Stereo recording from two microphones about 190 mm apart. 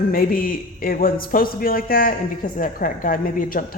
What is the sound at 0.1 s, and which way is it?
A man's voice, 50° left (ahead or behind).